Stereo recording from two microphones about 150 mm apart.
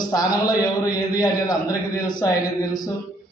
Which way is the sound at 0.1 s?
25° left (ahead or behind).